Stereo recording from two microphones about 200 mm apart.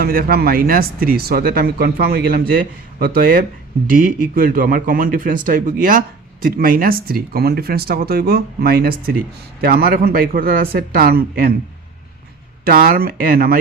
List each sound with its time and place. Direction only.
0.0 s speech: 50° right (ahead or behind)
12.6 s speech: 45° right (ahead or behind)